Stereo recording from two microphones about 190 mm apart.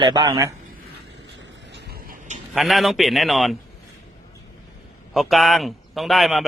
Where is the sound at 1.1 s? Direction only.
70° right (ahead or behind); by 2.4 s 40° right (ahead or behind).